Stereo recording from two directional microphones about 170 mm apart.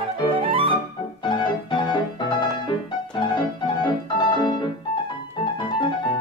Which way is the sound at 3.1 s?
25° left (ahead or behind).